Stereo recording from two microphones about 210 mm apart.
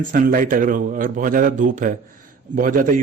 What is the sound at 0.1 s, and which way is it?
A man's voice, 40° right (ahead or behind).